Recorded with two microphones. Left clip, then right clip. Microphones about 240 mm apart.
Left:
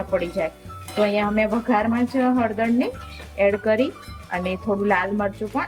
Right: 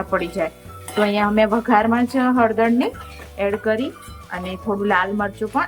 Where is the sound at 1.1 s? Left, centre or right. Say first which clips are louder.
Right 4 dB; centre.